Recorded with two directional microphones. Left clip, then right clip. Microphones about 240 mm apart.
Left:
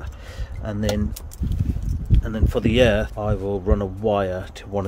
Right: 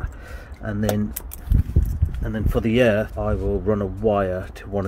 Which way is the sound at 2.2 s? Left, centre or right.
Centre.